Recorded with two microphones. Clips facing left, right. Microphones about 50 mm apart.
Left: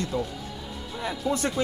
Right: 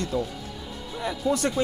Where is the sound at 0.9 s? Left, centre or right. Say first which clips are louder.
Right 2 dB; centre.